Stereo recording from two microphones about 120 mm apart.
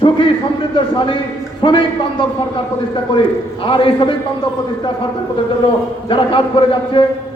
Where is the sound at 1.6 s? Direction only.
45° left (ahead or behind).